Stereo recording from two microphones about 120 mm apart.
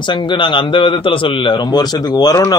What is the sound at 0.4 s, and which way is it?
A man's voice, 45° left (ahead or behind).